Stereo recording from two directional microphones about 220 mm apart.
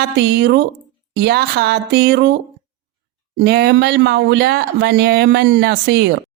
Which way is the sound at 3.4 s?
45° right (ahead or behind).